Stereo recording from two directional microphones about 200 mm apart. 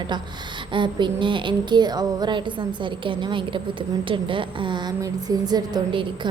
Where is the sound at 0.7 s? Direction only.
25° right (ahead or behind).